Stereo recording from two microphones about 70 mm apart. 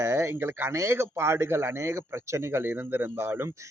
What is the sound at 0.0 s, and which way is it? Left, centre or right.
A man's voice, right.